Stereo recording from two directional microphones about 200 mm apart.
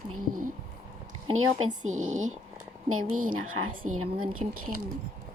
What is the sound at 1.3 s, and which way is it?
Speech, 90° right.